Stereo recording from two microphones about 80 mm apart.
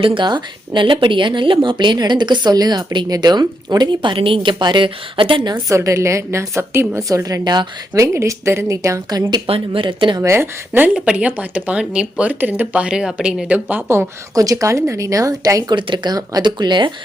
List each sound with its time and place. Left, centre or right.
0.0 s speech: right
5.5 s a woman's voice: right
7.4 s speech: right
7.9 s a woman's voice: right
9.0 s speech: right
9.7 s speech: right
10.2 s a woman's voice: right
10.9 s speech: centre
13.5 s speech: right
14.3 s speech: right
15.7 s speech: right
16.1 s speech: right
16.5 s speech: right